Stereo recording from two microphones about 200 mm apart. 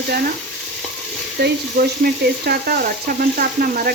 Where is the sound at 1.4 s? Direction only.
50° right (ahead or behind).